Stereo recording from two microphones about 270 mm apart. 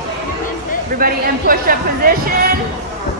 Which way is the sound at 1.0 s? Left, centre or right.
Right.